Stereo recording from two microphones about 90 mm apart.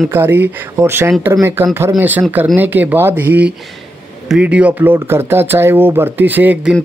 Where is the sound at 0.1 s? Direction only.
25° right (ahead or behind).